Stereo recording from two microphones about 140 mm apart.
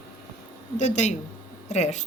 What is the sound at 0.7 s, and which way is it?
A woman's voice, 55° left (ahead or behind).